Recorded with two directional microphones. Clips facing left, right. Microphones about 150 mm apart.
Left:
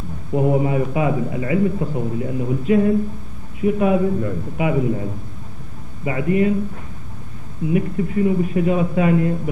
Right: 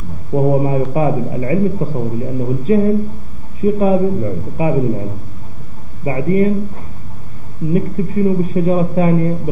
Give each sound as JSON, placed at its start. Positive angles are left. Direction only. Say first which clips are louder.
{"t": 0.3, "sound": "a man's voice", "louder": "right 4 dB", "side_deg": -35}
{"t": 6.0, "sound": "a man's voice", "louder": "right 3 dB", "side_deg": -35}
{"t": 7.7, "sound": "a man's voice", "louder": "right 3 dB", "side_deg": -35}